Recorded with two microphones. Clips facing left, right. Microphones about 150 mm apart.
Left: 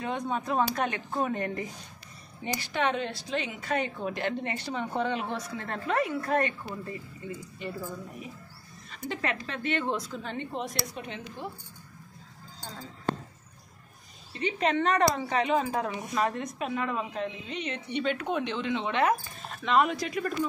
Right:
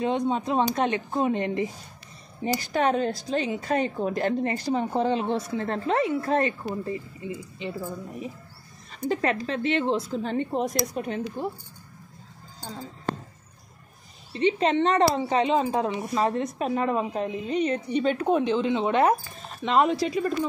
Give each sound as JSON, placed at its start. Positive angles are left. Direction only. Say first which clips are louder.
{"t": 0.0, "sound": "a woman's voice", "louder": "right 7 dB", "side_deg": -25}
{"t": 2.4, "sound": "a woman's voice", "louder": "right 5 dB", "side_deg": -40}
{"t": 8.9, "sound": "a woman's voice", "louder": "right 7 dB", "side_deg": -40}
{"t": 14.3, "sound": "a woman's voice", "louder": "right 5 dB", "side_deg": -30}